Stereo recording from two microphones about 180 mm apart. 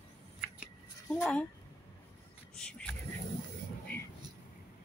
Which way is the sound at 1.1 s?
5° left (ahead or behind).